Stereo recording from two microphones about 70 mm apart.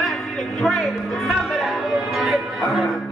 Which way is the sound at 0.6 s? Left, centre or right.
Centre.